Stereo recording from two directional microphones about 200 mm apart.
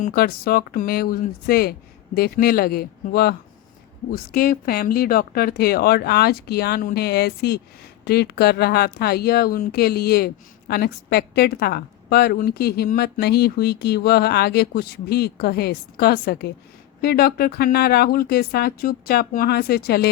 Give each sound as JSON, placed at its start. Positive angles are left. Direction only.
{"t": 0.0, "sound": "speech", "side_deg": 50}